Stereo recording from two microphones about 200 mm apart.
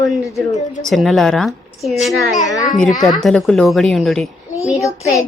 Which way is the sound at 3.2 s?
5° left (ahead or behind).